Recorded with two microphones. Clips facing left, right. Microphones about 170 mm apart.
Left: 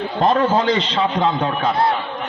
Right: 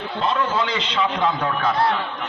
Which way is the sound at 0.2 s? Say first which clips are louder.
Left 6 dB; 45° left (ahead or behind).